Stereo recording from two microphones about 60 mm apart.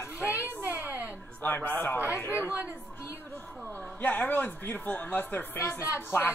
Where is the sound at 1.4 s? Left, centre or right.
Left.